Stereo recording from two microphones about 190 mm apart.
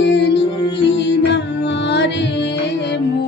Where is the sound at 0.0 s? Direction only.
65° left (ahead or behind).